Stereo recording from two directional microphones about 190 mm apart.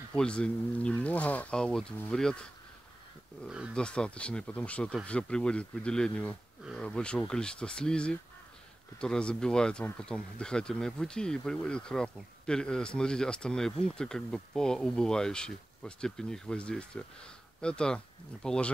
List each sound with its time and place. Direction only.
0.2 s speech: 5° left (ahead or behind)
3.4 s speech: 5° right (ahead or behind)